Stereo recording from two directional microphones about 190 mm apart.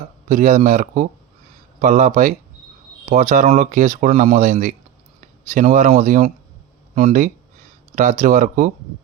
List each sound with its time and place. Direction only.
0.3 s speech: 45° right (ahead or behind)